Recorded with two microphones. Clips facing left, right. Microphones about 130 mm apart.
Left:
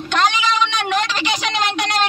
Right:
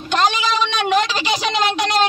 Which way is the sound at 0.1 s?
20° right (ahead or behind).